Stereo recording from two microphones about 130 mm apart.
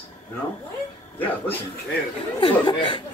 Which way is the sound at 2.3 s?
40° left (ahead or behind).